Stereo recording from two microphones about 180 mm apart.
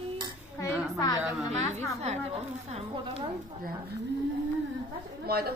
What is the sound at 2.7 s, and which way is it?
Speech, 35° right (ahead or behind).